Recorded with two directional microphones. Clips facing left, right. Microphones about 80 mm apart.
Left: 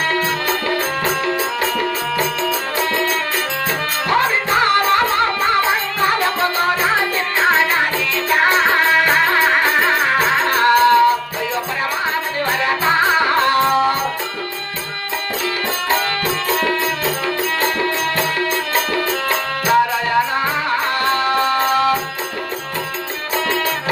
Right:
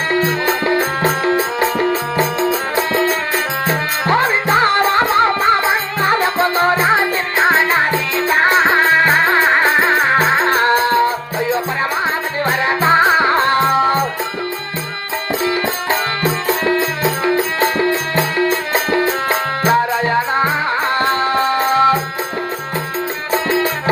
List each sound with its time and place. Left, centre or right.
0.1 s music: right
15.9 s music: right
23.3 s music: right